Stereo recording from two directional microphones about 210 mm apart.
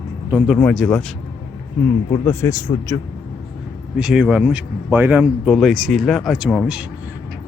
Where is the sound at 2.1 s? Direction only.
10° left (ahead or behind).